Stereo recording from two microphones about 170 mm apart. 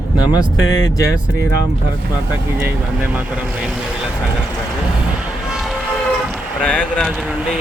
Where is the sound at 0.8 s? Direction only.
20° left (ahead or behind).